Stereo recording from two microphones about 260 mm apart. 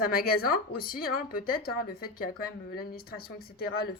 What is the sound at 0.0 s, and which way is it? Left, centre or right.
A woman's voice, left.